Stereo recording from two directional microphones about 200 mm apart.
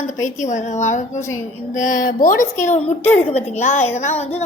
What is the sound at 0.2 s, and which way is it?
A woman's voice, 35° left (ahead or behind).